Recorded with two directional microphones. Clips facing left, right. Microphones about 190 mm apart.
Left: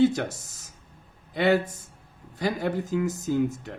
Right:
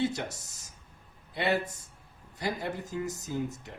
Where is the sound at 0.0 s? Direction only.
90° left.